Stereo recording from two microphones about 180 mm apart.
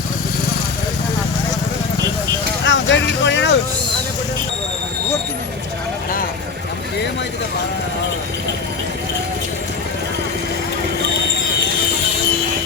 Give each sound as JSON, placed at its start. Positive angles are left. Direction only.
{"t": 2.6, "sound": "vehicle", "side_deg": 90}